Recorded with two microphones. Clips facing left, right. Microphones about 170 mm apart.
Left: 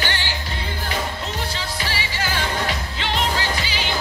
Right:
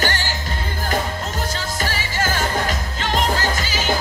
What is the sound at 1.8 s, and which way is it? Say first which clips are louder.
Music: right 5 dB; 45° right (ahead or behind).